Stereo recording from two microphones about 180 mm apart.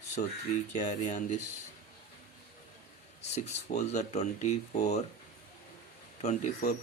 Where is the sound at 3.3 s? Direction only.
40° left (ahead or behind).